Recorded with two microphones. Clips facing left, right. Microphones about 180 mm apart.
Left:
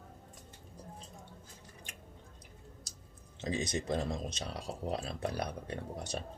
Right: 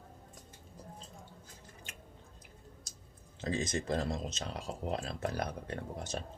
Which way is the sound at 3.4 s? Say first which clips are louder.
Even; 20° left (ahead or behind).